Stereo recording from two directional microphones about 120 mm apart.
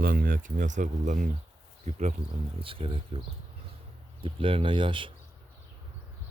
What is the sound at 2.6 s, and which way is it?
Speech, 50° right (ahead or behind).